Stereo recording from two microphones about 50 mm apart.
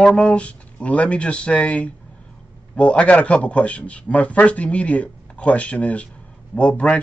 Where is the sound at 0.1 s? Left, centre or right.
Left.